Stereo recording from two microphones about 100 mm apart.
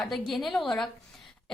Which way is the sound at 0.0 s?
Centre (ahead or behind).